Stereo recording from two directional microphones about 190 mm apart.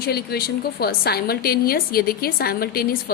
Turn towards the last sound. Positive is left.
turn(degrees=50)  # may be behind; listen again after turning